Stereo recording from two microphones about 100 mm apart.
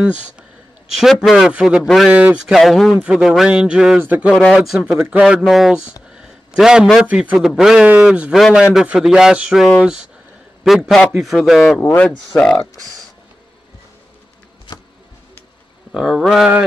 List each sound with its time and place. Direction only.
0.0 s speech: 10° right (ahead or behind)
0.9 s speech: centre (ahead or behind)
1.5 s speech: 10° right (ahead or behind)
2.5 s speech: centre (ahead or behind)
6.1 s a sound: 5° right (ahead or behind)
7.0 s speech: 10° right (ahead or behind)
11.8 s speech: 20° left (ahead or behind)
12.4 s speech: 5° left (ahead or behind)
15.9 s speech: 5° right (ahead or behind)